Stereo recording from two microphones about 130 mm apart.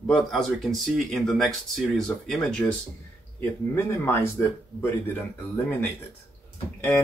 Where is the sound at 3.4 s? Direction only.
20° left (ahead or behind).